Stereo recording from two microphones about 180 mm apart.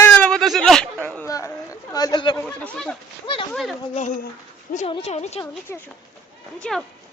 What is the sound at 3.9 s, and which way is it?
Speech, 40° left (ahead or behind).